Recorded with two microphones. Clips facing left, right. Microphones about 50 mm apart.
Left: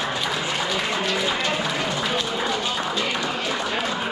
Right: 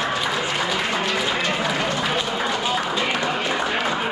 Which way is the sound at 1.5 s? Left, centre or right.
Centre.